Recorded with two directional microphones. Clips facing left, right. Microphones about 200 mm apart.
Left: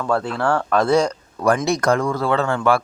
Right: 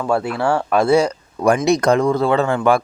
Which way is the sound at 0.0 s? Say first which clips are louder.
Right 2 dB; 10° right (ahead or behind).